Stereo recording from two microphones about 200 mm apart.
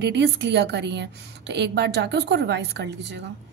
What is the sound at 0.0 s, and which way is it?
A woman's voice, 60° right (ahead or behind).